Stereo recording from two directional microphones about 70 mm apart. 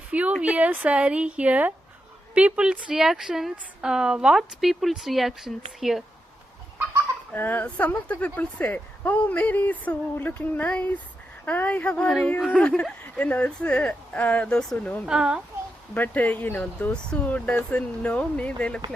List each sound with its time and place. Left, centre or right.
0.1 s a sound: centre
0.4 s a woman's voice: right; by 6.0 s centre
7.3 s speech: left
15.0 s a woman's voice: centre
16.0 s speech: left